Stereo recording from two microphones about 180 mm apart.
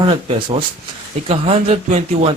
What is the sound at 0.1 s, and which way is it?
Speech, 25° right (ahead or behind).